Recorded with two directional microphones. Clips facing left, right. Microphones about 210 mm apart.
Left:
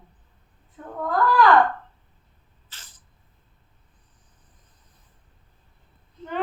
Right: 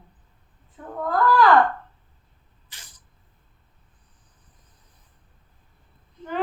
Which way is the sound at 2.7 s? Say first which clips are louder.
Right 1 dB; 15° right (ahead or behind).